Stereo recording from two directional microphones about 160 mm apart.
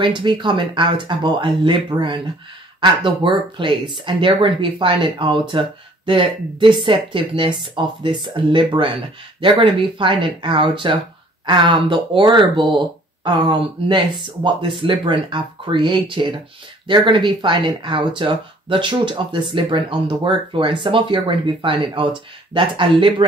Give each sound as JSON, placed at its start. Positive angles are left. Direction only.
{"t": 0.0, "sound": "speech", "side_deg": -30}